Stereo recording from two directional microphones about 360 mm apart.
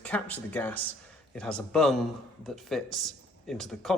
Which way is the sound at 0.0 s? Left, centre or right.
Centre.